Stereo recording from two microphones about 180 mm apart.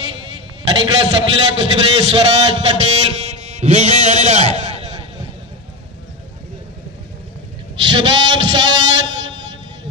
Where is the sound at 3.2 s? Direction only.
35° right (ahead or behind).